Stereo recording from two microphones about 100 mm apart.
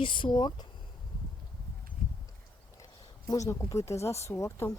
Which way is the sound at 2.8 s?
35° left (ahead or behind).